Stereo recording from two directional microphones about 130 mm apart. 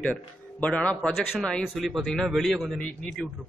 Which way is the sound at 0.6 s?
10° left (ahead or behind).